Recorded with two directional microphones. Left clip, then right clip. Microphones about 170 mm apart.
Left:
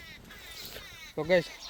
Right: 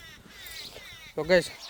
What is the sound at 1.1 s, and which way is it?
Speech, 40° right (ahead or behind).